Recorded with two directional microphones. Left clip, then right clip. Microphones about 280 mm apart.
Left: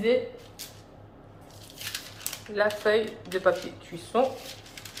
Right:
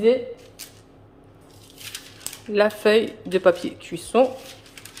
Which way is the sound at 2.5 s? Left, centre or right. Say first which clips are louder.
Right 6 dB; right.